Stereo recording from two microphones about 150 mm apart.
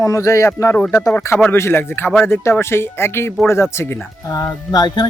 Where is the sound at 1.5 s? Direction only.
15° left (ahead or behind).